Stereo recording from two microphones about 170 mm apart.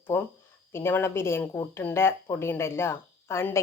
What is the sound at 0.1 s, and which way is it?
Speech, 15° left (ahead or behind).